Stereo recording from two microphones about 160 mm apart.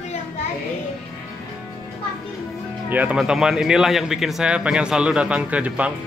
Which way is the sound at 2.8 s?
10° right (ahead or behind).